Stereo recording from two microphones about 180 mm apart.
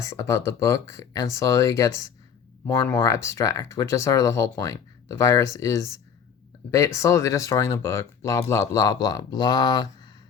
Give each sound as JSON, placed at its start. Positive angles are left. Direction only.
{"t": 0.0, "sound": "speech", "side_deg": 15}